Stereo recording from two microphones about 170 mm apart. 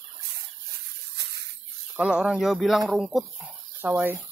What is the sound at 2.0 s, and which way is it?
Speech, 5° right (ahead or behind).